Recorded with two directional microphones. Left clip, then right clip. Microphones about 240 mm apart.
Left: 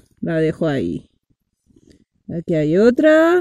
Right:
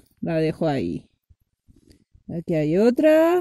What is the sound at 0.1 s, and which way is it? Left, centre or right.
Speech, centre.